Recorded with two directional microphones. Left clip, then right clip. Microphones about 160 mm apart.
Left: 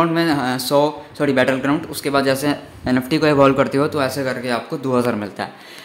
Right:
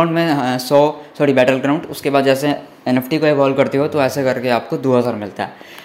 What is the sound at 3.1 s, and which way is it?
Speech, 5° left (ahead or behind).